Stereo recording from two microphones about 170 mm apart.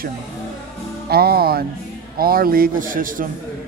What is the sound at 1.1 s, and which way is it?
Speech, 65° right (ahead or behind).